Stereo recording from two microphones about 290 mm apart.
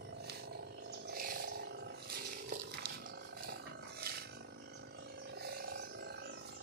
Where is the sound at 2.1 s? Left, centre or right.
Right.